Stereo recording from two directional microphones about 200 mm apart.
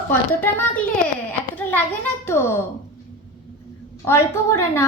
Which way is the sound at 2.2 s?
10° left (ahead or behind).